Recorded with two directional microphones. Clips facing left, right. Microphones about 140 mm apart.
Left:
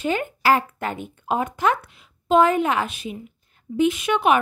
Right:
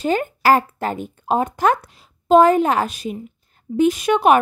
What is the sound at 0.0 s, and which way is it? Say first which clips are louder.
Speech: right 4 dB; 40° right (ahead or behind).